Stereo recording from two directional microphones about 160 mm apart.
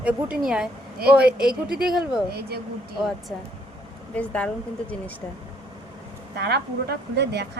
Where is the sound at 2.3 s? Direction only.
80° right.